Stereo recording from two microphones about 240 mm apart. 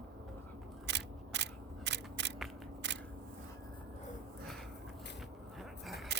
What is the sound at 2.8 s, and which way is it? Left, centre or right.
Single-lens reflex camera, right.